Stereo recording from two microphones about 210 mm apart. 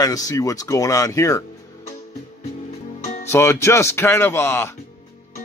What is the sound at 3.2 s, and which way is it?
A man's voice, 10° left (ahead or behind).